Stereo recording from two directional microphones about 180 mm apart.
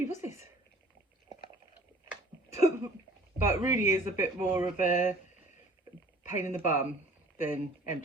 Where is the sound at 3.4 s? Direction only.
15° right (ahead or behind).